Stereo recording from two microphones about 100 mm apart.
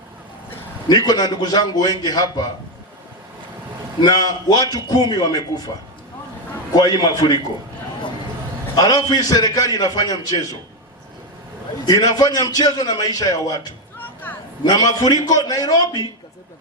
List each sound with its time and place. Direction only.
0.9 s a man's voice: 40° left (ahead or behind)
4.0 s a man's voice: 40° left (ahead or behind)
6.7 s a man's voice: 45° left (ahead or behind)
8.7 s a man's voice: 45° left (ahead or behind)
11.9 s a man's voice: 40° left (ahead or behind)
14.0 s a sound: 20° left (ahead or behind)
14.6 s a man's voice: 45° left (ahead or behind)